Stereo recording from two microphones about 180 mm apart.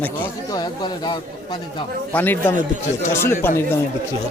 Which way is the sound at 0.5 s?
25° left (ahead or behind).